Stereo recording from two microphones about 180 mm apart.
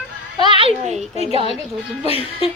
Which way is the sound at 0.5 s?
30° right (ahead or behind).